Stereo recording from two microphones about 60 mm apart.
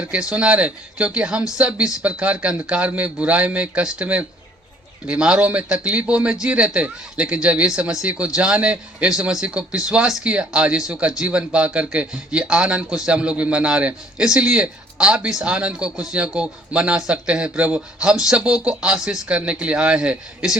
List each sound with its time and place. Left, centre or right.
0.0 s a man's voice: centre
18.0 s a man's voice: centre